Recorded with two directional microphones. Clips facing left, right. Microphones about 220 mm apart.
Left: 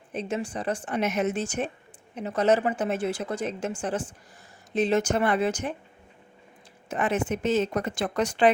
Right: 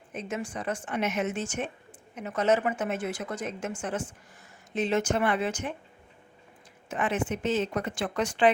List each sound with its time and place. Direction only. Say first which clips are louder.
0.1 s a woman's voice: left 4 dB; 30° left (ahead or behind)
6.8 s a woman's voice: left 3 dB; 40° left (ahead or behind)